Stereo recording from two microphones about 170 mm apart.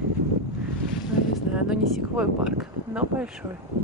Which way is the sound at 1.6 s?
5° right (ahead or behind).